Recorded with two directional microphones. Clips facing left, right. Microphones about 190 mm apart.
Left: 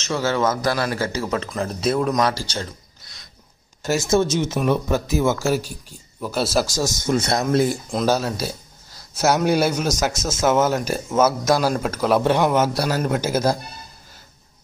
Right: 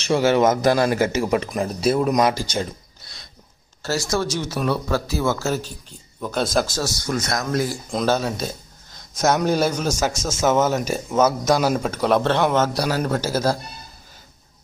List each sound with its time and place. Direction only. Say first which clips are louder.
0.0 s speech: right 4 dB; 15° right (ahead or behind)
2.1 s speech: right 2 dB; 15° right (ahead or behind)
3.8 s speech: left 4 dB; 20° left (ahead or behind)
7.9 s speech: left 1 dB; 5° left (ahead or behind)